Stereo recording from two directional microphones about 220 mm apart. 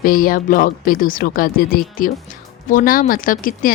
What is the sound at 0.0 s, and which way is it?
Speech, 40° left (ahead or behind).